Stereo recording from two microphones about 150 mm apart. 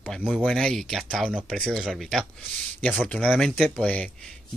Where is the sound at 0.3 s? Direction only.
5° left (ahead or behind).